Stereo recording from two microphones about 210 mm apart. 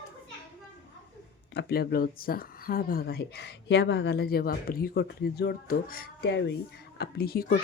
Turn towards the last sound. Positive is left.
turn(degrees=45)  # may be behind; listen again after turning